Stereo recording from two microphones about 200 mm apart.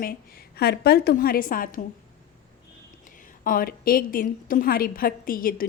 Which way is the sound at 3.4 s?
45° left (ahead or behind).